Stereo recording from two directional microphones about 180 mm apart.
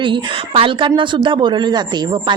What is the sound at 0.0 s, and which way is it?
Speech, 25° right (ahead or behind).